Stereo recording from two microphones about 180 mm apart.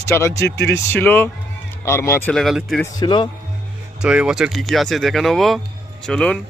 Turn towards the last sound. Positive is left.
turn(degrees=5)  # may be behind; listen again after turning